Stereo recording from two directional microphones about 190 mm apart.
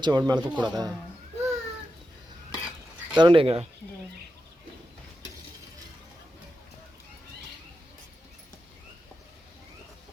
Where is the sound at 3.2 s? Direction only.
25° right (ahead or behind).